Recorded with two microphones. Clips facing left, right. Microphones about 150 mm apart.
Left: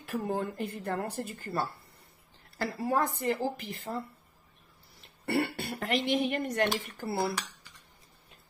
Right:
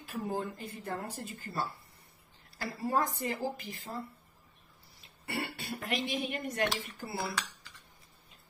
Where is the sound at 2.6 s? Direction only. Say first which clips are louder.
Left 3 dB; 60° left (ahead or behind).